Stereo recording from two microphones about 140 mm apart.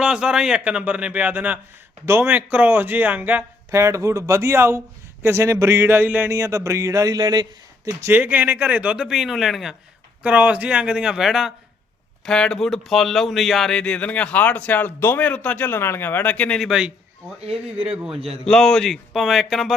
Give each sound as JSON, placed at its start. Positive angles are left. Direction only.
{"t": 0.0, "sound": "speech", "side_deg": -5}
{"t": 7.9, "sound": "speech", "side_deg": -15}